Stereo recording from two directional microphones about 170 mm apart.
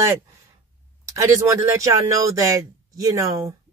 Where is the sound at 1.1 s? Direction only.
15° right (ahead or behind).